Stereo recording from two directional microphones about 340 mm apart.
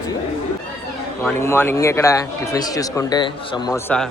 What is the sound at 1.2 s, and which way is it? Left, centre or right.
A man's voice, centre.